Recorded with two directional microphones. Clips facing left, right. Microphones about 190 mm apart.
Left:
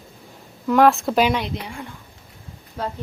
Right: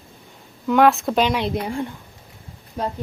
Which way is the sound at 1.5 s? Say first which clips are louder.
Right 6 dB; 45° right (ahead or behind).